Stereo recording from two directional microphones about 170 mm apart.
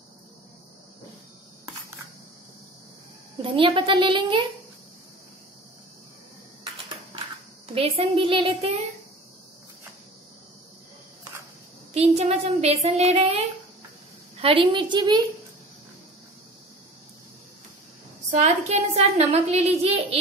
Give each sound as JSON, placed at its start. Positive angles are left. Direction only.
{"t": 3.4, "sound": "a child's voice", "side_deg": -30}
{"t": 7.7, "sound": "a woman's voice", "side_deg": -35}
{"t": 11.9, "sound": "a woman's voice", "side_deg": -40}
{"t": 14.4, "sound": "a child's voice", "side_deg": -30}
{"t": 18.3, "sound": "a woman's voice", "side_deg": -40}